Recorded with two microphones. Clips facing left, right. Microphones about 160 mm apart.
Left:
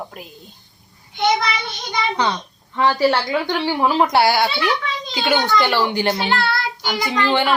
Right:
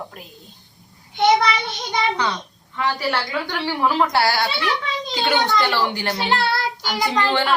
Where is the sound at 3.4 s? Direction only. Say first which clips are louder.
Left 3 dB; 20° left (ahead or behind).